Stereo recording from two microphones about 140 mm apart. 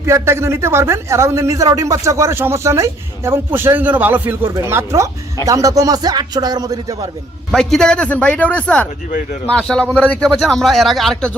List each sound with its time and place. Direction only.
0.0 s speech: 20° right (ahead or behind)
7.5 s a man's voice: 5° left (ahead or behind)